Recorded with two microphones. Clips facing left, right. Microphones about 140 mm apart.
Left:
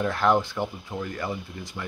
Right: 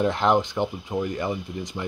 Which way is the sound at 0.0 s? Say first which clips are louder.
Right 2 dB; 20° right (ahead or behind).